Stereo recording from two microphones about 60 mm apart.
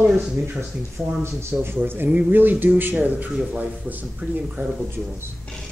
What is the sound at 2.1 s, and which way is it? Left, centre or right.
Speech, right.